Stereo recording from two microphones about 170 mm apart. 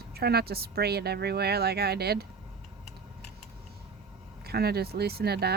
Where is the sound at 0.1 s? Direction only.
70° right (ahead or behind).